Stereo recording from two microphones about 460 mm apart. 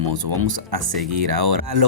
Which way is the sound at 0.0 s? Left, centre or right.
Right.